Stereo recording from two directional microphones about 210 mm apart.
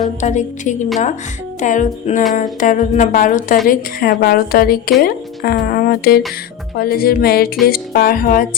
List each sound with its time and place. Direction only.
0.2 s speech: 35° left (ahead or behind)